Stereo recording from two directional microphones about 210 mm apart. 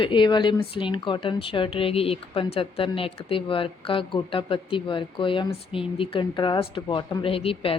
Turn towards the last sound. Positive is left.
turn(degrees=25)  # may be behind; listen again after turning